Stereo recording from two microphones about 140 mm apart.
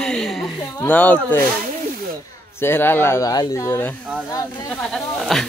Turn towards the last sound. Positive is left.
turn(degrees=0)  # may be behind; listen again after turning